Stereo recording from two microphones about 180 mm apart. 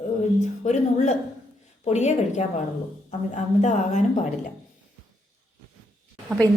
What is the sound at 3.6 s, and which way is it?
Speech, 40° left (ahead or behind).